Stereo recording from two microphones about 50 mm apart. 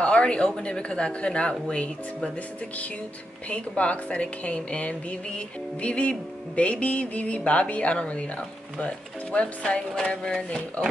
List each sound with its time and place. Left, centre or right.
0.0 s a woman's voice: left
3.4 s a woman's voice: left